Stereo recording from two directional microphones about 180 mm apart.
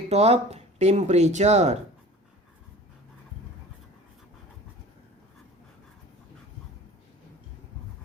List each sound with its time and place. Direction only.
0.1 s speech: 35° right (ahead or behind)